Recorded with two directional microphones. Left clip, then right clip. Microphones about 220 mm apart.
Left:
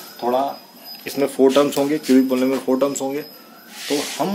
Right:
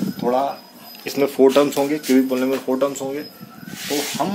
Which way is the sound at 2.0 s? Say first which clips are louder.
Left 2 dB; 20° left (ahead or behind).